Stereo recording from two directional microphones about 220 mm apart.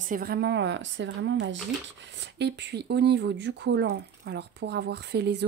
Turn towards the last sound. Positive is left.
turn(degrees=-50)  # may be behind; listen again after turning